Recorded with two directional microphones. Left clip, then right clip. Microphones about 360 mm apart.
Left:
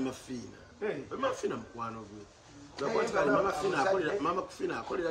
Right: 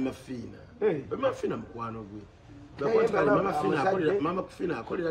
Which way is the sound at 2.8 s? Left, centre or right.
Centre.